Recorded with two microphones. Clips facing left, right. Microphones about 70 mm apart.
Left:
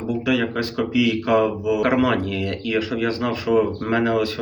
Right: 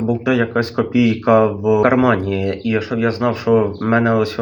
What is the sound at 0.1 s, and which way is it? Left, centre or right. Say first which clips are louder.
Speech: right 3 dB; right.